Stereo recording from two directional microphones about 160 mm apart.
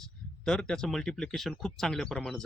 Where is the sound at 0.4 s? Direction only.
5° left (ahead or behind).